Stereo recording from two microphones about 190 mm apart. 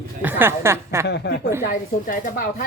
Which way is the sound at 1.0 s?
65° left (ahead or behind).